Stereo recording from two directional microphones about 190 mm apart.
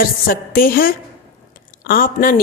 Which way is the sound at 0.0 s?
50° left (ahead or behind).